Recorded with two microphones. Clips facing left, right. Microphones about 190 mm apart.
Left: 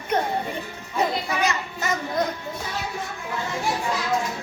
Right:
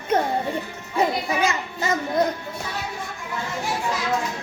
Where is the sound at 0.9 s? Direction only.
25° right (ahead or behind).